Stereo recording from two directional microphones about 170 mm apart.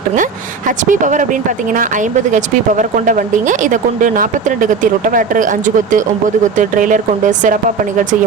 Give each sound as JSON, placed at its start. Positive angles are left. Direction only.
{"t": 0.9, "sound": "speech", "side_deg": -50}